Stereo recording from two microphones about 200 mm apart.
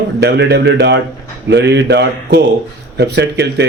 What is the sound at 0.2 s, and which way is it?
Speech, 60° right (ahead or behind).